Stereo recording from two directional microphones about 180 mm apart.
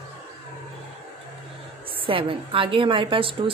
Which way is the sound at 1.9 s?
30° right (ahead or behind).